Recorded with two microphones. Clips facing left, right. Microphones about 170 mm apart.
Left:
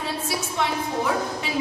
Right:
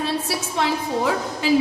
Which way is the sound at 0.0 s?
75° right (ahead or behind).